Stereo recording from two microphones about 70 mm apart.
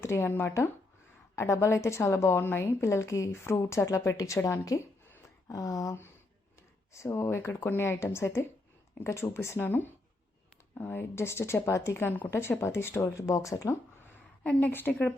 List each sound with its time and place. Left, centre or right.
0.0 s speech: left
1.4 s a woman's voice: left
6.9 s speech: left
9.6 s a woman's voice: left
14.4 s a woman's voice: left